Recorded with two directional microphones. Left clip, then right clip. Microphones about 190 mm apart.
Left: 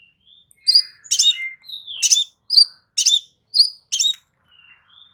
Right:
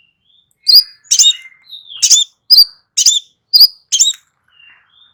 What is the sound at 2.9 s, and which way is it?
Bird, 15° right (ahead or behind).